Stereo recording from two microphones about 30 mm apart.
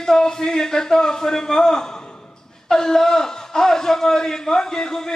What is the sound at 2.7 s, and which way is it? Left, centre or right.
A man's voice, centre.